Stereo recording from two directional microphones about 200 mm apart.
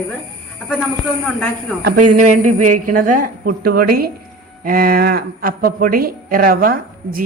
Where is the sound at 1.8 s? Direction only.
40° right (ahead or behind).